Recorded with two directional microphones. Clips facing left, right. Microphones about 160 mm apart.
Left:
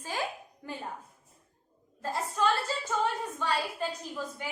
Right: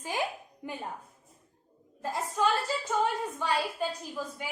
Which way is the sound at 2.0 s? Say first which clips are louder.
Even; 15° right (ahead or behind).